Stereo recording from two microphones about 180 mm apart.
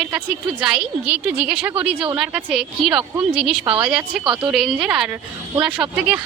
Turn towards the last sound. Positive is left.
turn(degrees=-5)  # may be behind; listen again after turning